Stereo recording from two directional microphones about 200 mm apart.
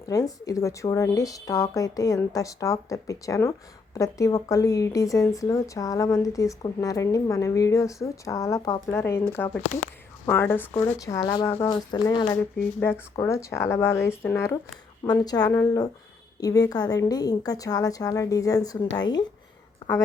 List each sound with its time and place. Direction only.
0.0 s a woman's voice: 15° left (ahead or behind)
12.8 s a woman's voice: 15° left (ahead or behind)